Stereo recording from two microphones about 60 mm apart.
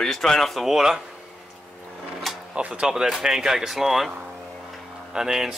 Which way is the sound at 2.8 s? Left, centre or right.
Centre.